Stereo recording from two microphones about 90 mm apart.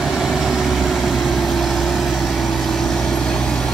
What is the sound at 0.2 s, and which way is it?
Vehicle, 5° right (ahead or behind).